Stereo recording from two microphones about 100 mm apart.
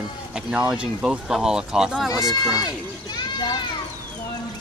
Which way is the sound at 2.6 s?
45° left (ahead or behind).